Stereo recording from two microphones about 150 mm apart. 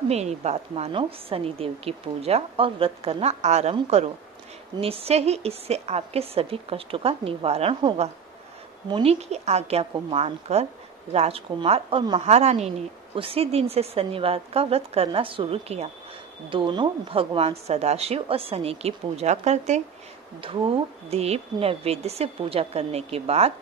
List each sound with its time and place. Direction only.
0.1 s a woman's voice: 45° right (ahead or behind)
4.7 s a woman's voice: 40° right (ahead or behind)
20.3 s a woman's voice: 40° right (ahead or behind)